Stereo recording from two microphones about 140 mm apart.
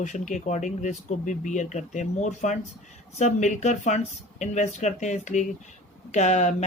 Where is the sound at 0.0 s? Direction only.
60° left (ahead or behind).